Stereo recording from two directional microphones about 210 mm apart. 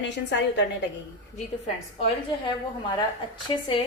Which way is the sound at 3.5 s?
25° left (ahead or behind).